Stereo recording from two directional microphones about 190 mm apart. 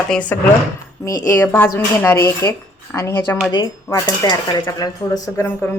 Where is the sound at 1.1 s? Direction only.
15° left (ahead or behind).